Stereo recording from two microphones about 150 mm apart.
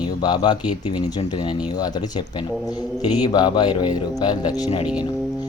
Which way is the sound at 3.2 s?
30° left (ahead or behind).